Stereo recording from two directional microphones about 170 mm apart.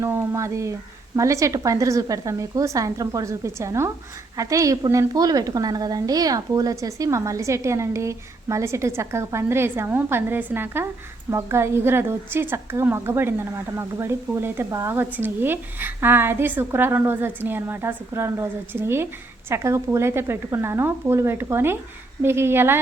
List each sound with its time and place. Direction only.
0.0 s a woman's voice: 15° right (ahead or behind)